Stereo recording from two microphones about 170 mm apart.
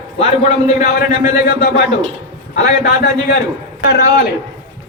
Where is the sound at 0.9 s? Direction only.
60° left (ahead or behind).